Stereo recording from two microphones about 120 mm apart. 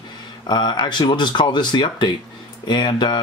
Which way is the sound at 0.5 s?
40° left (ahead or behind).